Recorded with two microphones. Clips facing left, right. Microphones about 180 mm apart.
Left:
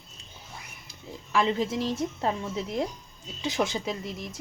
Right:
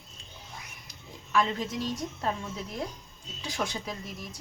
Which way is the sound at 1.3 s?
25° left (ahead or behind).